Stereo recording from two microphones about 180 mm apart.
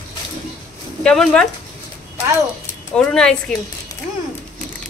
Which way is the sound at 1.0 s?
5° left (ahead or behind).